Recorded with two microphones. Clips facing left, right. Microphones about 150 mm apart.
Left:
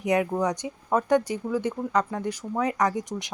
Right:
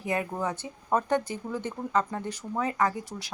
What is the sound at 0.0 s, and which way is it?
Speech, 15° left (ahead or behind).